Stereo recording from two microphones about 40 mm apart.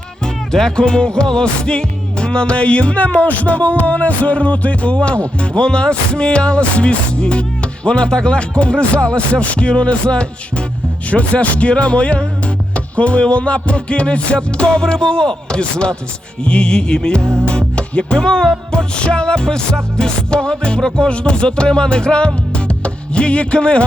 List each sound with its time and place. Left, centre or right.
0.3 s music: centre
0.8 s music: left
17.7 s speech: left
18.7 s music: left